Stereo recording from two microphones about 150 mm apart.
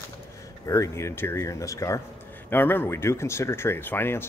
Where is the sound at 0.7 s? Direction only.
20° left (ahead or behind).